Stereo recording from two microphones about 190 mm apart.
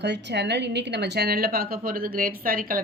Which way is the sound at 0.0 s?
65° right (ahead or behind).